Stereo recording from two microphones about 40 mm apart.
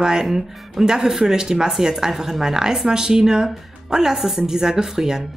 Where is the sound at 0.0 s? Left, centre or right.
Centre.